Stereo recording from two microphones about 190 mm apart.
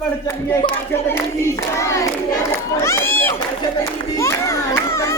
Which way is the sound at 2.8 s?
15° left (ahead or behind).